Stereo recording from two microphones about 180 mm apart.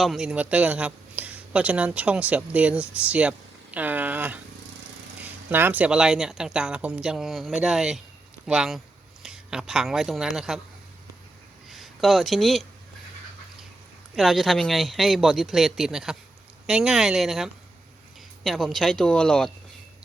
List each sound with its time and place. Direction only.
0.0 s speech: centre (ahead or behind)
5.5 s speech: 10° right (ahead or behind)
11.7 s speech: centre (ahead or behind)
14.2 s speech: centre (ahead or behind)